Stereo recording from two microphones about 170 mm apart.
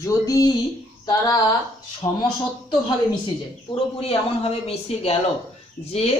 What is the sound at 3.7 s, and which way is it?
Speech, 30° left (ahead or behind).